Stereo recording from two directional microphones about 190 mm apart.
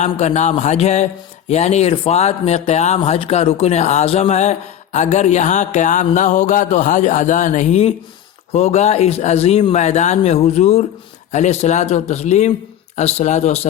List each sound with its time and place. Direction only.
0.0 s speech: 35° left (ahead or behind)